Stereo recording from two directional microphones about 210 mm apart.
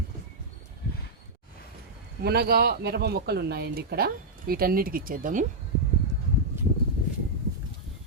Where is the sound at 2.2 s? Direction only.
50° right (ahead or behind).